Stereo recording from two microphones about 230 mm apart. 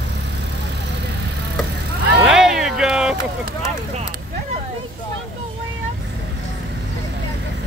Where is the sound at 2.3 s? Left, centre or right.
Centre.